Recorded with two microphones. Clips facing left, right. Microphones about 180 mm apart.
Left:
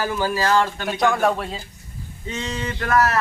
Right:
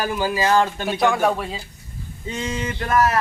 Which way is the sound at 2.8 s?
20° right (ahead or behind).